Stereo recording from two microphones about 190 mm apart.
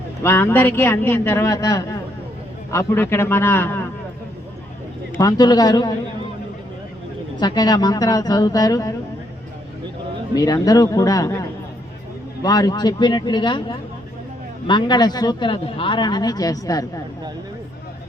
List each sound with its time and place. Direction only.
0.2 s a man's voice: 15° left (ahead or behind)
5.1 s speech: 20° left (ahead or behind)
7.3 s speech: 20° left (ahead or behind)
10.3 s a man's voice: 20° left (ahead or behind)